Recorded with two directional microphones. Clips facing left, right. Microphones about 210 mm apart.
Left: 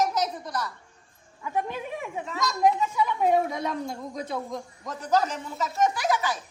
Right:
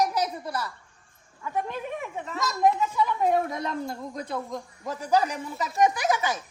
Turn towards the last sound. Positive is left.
turn(degrees=-20)  # may be behind; listen again after turning